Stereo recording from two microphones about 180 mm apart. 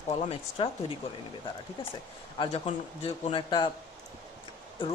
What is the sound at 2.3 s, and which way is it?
Speech, 25° left (ahead or behind).